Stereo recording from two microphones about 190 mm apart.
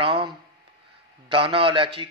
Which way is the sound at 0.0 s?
25° right (ahead or behind).